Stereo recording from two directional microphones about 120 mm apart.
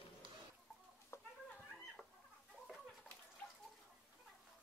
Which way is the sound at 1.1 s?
20° left (ahead or behind).